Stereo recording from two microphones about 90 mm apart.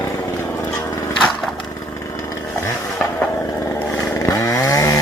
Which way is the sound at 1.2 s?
5° left (ahead or behind).